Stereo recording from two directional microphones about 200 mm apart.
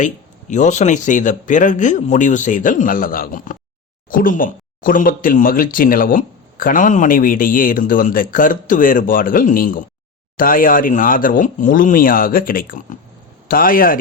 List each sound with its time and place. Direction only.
0.0 s speech: 40° left (ahead or behind)